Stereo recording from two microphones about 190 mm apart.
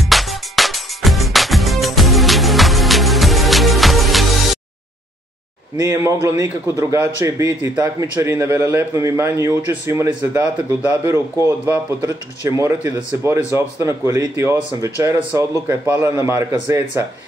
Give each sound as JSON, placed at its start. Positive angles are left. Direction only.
{"t": 0.1, "sound": "music", "side_deg": 0}
{"t": 5.8, "sound": "a man's voice", "side_deg": -15}